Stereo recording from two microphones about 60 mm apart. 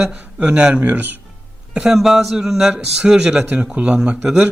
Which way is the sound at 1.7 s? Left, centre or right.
Centre.